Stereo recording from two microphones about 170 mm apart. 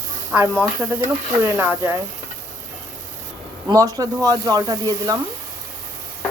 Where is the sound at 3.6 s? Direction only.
20° right (ahead or behind).